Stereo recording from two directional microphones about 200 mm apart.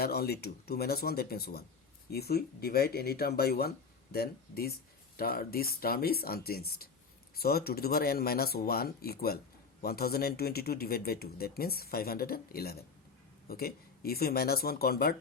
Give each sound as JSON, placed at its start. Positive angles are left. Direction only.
{"t": 0.0, "sound": "speech", "side_deg": 50}